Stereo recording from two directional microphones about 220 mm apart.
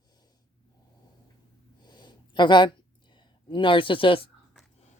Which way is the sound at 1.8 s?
20° left (ahead or behind).